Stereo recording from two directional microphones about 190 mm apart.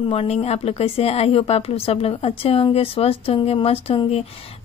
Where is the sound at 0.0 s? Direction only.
30° left (ahead or behind).